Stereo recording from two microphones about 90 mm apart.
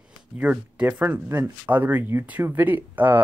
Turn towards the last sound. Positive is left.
turn(degrees=-20)  # may be behind; listen again after turning